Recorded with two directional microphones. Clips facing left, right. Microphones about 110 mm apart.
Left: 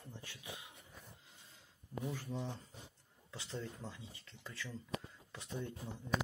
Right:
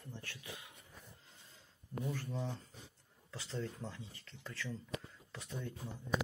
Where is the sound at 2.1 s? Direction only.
15° left (ahead or behind).